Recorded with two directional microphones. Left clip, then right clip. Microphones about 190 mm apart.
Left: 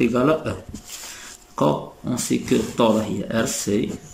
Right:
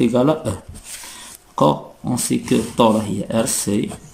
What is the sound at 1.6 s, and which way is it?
Speech, 20° right (ahead or behind).